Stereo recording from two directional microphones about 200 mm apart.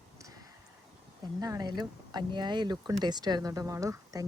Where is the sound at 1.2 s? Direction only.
20° right (ahead or behind).